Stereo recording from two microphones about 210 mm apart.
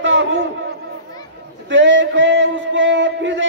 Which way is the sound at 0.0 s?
60° right (ahead or behind).